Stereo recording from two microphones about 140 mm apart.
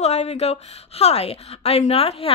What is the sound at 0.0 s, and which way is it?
A woman's voice, 50° left (ahead or behind).